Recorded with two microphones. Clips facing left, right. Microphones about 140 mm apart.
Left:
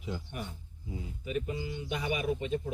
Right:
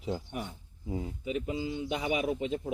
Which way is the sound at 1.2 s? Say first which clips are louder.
Even; 15° right (ahead or behind).